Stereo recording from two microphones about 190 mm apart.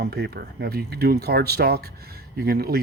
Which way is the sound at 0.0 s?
55° right (ahead or behind).